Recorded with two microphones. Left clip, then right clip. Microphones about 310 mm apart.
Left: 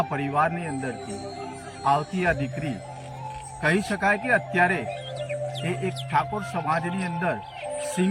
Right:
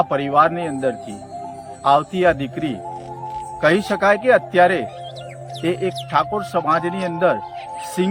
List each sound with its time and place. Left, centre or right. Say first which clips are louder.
0.0 s speech: right 8 dB; centre